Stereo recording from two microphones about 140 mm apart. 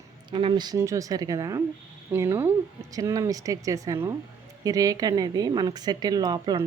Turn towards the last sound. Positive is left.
turn(degrees=-30)  # may be behind; listen again after turning